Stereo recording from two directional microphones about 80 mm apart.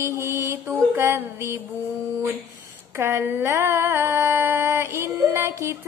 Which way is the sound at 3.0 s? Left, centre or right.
Right.